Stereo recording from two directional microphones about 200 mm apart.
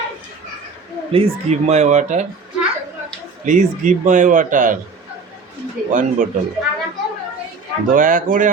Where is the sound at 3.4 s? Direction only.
40° right (ahead or behind).